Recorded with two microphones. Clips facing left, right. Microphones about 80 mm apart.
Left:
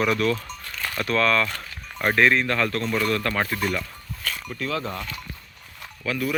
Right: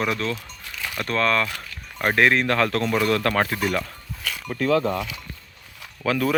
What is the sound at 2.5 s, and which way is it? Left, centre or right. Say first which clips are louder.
Speech: right 3 dB; right.